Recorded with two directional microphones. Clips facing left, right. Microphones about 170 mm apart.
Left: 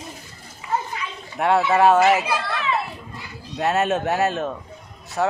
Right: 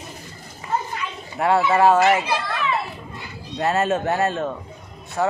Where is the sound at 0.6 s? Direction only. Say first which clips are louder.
Even; 40° right (ahead or behind).